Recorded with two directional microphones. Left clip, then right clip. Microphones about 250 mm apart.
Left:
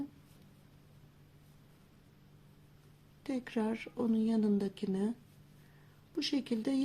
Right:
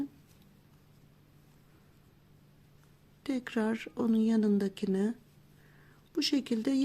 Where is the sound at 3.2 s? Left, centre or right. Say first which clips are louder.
Right 3 dB; right.